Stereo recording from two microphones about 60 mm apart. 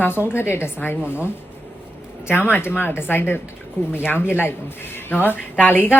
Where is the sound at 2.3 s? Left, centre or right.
Left.